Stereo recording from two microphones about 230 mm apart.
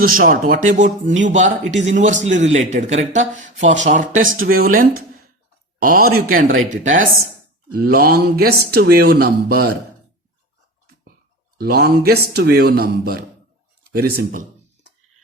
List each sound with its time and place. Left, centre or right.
0.0 s a man's voice: right
11.5 s a man's voice: right